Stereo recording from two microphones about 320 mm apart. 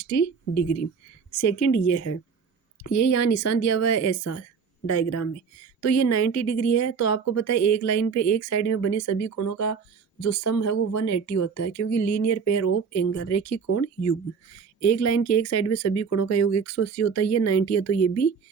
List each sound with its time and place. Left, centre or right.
0.0 s a woman's voice: left